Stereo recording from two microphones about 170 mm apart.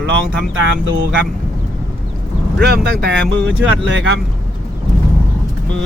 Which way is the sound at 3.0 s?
90° right.